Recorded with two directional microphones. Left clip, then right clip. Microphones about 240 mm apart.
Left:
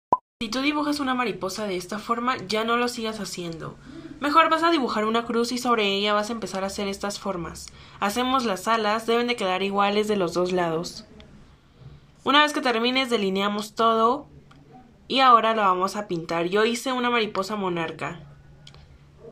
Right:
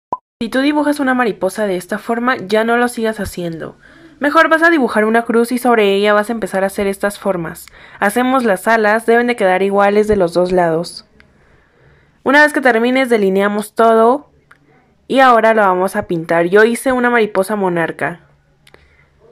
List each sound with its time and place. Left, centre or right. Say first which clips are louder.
0.4 s speech: right 10 dB; right